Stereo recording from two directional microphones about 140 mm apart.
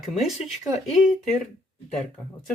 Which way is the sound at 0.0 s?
Centre (ahead or behind).